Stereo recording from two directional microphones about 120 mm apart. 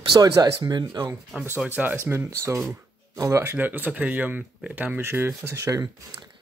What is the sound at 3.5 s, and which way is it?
Speech, 15° right (ahead or behind).